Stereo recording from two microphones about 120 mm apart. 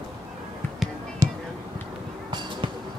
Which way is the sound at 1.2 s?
25° right (ahead or behind).